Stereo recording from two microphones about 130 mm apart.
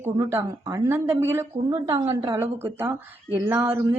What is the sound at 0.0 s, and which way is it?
A woman's voice, 15° right (ahead or behind).